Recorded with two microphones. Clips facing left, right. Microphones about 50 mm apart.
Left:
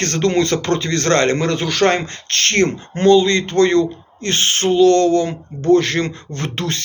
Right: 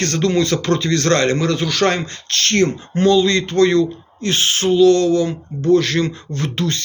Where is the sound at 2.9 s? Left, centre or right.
Left.